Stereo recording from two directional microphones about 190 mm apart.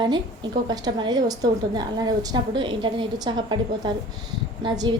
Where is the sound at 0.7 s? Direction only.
25° right (ahead or behind).